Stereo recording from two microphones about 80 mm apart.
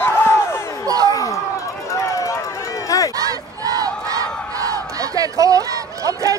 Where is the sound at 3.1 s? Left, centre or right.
Right.